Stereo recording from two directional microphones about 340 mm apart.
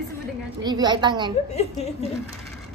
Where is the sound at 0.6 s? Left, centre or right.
Centre.